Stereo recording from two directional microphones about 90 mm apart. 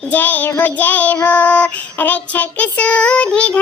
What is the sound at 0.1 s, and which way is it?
Child singing, 20° left (ahead or behind).